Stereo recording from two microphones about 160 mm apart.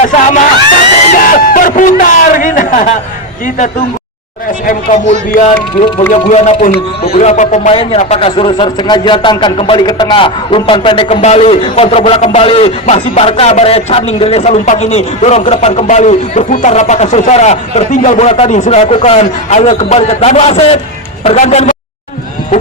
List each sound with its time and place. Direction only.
0.0 s speech: 50° left (ahead or behind)
1.1 s a sound: 55° left (ahead or behind)
4.6 s speech: 55° left (ahead or behind)
6.2 s speech: 45° left (ahead or behind)
7.7 s a man's voice: 35° left (ahead or behind)